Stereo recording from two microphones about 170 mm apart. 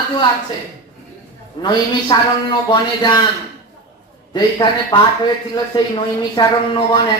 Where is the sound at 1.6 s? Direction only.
25° left (ahead or behind).